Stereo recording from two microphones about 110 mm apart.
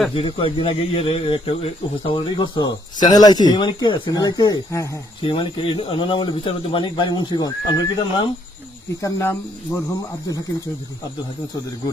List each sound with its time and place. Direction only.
0.1 s speech: 55° left (ahead or behind)
4.1 s speech: 35° left (ahead or behind)
5.2 s speech: 50° left (ahead or behind); by 7.9 s 35° left (ahead or behind)
9.0 s speech: 25° left (ahead or behind)
9.9 s speech: 35° left (ahead or behind)